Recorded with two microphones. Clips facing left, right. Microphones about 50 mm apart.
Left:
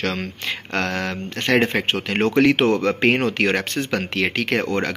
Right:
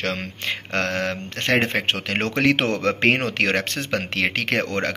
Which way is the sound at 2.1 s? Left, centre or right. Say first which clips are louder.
Left 4 dB; right.